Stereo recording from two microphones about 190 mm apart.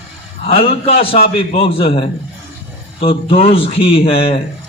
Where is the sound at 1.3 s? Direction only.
30° left (ahead or behind).